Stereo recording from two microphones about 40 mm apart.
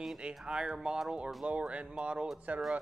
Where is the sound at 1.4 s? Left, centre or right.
Right.